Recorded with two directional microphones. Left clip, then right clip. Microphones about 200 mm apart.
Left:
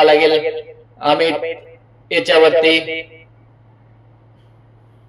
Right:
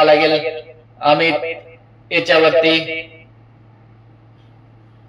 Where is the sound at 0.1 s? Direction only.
50° left (ahead or behind).